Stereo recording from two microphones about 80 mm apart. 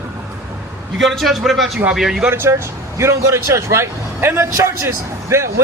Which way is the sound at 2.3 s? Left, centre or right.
Right.